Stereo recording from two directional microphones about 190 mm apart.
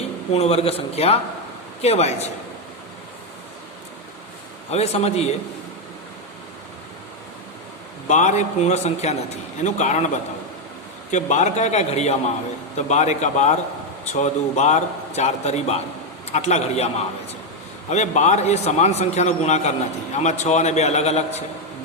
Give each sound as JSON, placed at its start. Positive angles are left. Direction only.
{"t": 0.3, "sound": "a man's voice", "side_deg": 35}
{"t": 4.7, "sound": "a man's voice", "side_deg": 35}
{"t": 8.0, "sound": "a man's voice", "side_deg": 40}
{"t": 11.1, "sound": "a man's voice", "side_deg": 40}